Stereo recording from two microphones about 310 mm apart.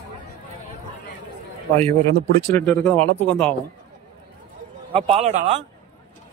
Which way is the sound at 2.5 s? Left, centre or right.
Centre.